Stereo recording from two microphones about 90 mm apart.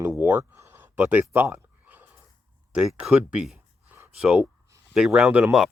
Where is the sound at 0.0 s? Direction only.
25° right (ahead or behind).